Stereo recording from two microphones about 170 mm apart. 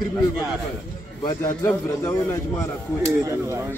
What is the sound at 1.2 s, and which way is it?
Speech, 20° left (ahead or behind).